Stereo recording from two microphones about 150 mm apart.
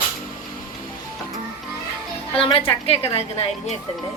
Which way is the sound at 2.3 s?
40° left (ahead or behind).